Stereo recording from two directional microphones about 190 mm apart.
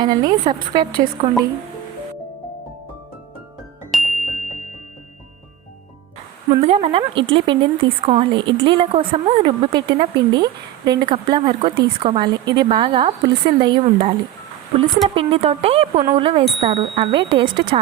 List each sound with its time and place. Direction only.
0.0 s a woman's voice: 20° right (ahead or behind)
3.9 s music: centre (ahead or behind)
4.3 s music: 40° left (ahead or behind)
6.5 s a woman's voice: 35° right (ahead or behind)